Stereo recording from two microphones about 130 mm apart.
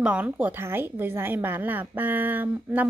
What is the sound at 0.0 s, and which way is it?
A woman's voice, 10° right (ahead or behind).